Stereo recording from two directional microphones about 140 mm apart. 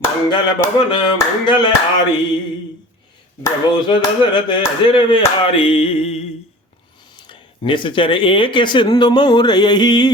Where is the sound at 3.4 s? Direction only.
30° left (ahead or behind).